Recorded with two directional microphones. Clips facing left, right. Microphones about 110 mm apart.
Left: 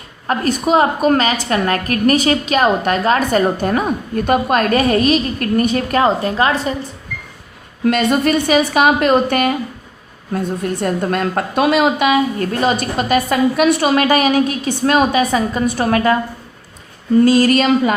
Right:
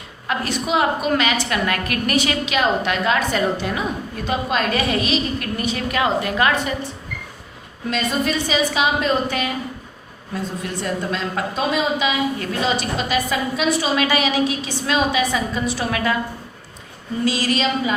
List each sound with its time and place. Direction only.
0.3 s a woman's voice: 45° left (ahead or behind)
7.9 s a woman's voice: 60° left (ahead or behind)
17.2 s a woman's voice: 50° left (ahead or behind)